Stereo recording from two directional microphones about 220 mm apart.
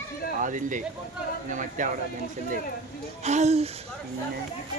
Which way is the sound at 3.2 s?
30° right (ahead or behind).